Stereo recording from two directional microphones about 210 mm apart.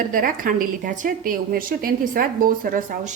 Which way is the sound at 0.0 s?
40° right (ahead or behind).